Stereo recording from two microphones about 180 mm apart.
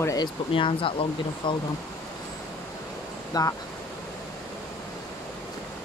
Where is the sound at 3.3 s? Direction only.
20° left (ahead or behind).